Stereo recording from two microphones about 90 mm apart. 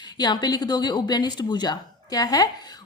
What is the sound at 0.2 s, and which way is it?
A woman's voice, 50° left (ahead or behind).